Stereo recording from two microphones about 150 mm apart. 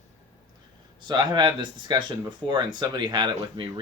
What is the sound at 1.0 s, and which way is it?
Speech, 30° right (ahead or behind).